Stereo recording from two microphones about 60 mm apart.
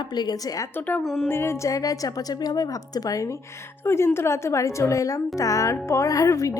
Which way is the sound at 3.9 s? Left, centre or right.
Left.